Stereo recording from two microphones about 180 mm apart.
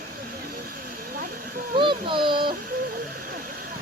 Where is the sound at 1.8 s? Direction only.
25° right (ahead or behind).